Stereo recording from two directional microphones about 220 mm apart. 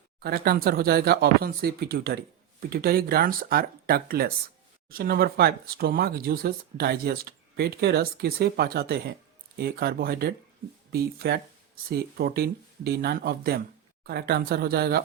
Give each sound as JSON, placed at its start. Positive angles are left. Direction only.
{"t": 0.2, "sound": "speech", "side_deg": -45}